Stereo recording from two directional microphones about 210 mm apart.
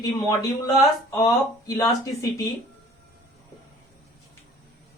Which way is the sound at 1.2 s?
15° left (ahead or behind).